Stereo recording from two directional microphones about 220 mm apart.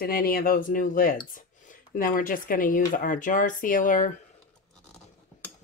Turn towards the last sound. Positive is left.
turn(degrees=35)  # may be behind; listen again after turning